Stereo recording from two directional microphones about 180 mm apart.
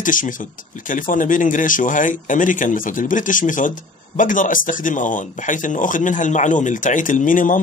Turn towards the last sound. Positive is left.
turn(degrees=50)  # may be behind; listen again after turning